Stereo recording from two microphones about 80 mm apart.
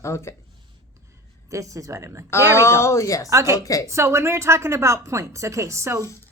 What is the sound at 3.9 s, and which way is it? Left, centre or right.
A woman's voice, right.